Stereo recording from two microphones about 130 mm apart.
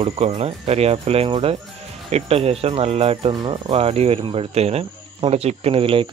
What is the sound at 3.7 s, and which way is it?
Speech, 50° right (ahead or behind).